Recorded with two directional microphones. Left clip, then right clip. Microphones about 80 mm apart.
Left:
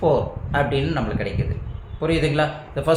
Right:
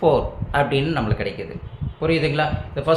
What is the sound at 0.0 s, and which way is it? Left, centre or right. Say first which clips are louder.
Speech: right 2 dB; right.